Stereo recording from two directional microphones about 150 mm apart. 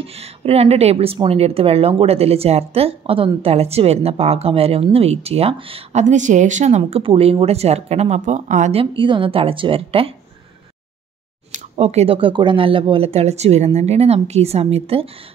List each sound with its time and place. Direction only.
0.0 s a woman's voice: 40° right (ahead or behind)
6.0 s a woman's voice: 55° right (ahead or behind)
6.8 s speech: 35° right (ahead or behind); by 8.8 s 55° right (ahead or behind)
8.9 s a woman's voice: 35° right (ahead or behind)
11.5 s a woman's voice: 45° right (ahead or behind)